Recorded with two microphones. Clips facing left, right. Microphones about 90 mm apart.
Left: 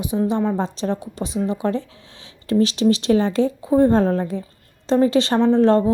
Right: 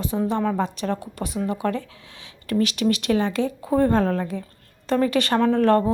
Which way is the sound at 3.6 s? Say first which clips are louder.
Left 3 dB; 20° left (ahead or behind).